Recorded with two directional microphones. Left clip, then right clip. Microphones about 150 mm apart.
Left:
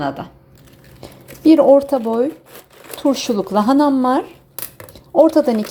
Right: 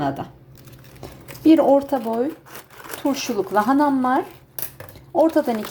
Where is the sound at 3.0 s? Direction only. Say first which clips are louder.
Left 5 dB; 35° left (ahead or behind).